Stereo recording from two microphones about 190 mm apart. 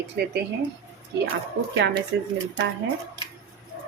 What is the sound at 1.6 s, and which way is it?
Speech, 60° right (ahead or behind).